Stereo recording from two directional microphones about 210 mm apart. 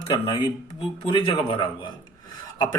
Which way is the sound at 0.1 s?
15° left (ahead or behind).